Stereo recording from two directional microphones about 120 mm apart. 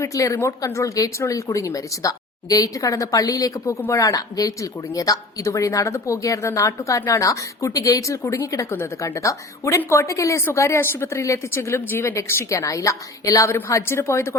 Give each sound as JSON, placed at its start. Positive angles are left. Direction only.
{"t": 0.0, "sound": "a woman's voice", "side_deg": 25}